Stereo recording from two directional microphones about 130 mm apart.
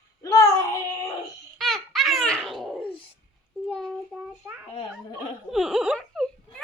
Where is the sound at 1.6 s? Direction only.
Centre (ahead or behind).